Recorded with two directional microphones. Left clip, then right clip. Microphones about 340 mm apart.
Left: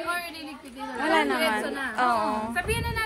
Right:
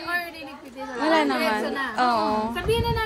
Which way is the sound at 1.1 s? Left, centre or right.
Centre.